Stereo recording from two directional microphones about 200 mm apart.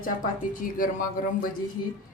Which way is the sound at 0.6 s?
45° left (ahead or behind).